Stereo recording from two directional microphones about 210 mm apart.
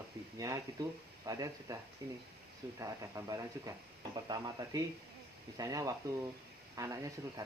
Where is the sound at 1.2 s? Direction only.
15° right (ahead or behind).